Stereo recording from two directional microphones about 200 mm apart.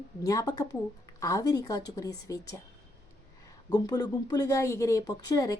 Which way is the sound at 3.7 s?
20° left (ahead or behind).